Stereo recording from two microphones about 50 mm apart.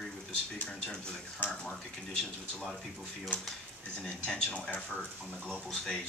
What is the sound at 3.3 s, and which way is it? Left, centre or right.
Speech, left.